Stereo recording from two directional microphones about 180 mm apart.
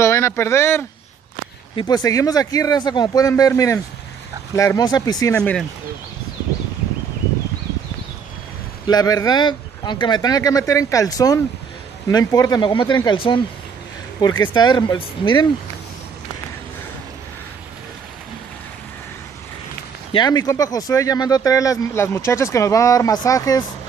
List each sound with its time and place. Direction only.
0.0 s speech: 15° left (ahead or behind)
5.4 s speech: 5° left (ahead or behind)
8.8 s speech: 20° left (ahead or behind)
14.5 s speech: 25° left (ahead or behind)
20.1 s speech: 25° left (ahead or behind)